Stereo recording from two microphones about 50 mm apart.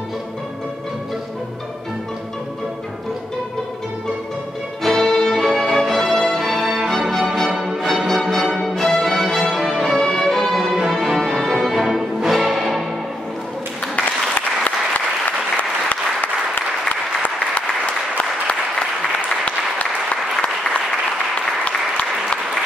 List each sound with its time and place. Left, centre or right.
4.8 s music: centre
5.3 s violin: centre
5.8 s music: centre
15.2 s applause: left
18.1 s applause: left
21.6 s applause: centre